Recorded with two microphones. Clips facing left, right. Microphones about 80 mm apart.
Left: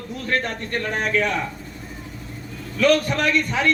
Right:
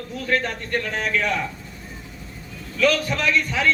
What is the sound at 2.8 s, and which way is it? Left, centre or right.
Speech, left.